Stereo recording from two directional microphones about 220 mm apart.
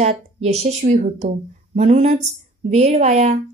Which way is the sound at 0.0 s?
30° right (ahead or behind).